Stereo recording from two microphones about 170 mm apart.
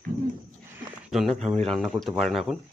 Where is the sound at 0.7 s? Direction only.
5° right (ahead or behind).